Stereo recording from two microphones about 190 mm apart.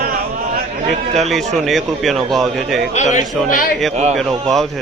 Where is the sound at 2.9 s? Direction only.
40° left (ahead or behind).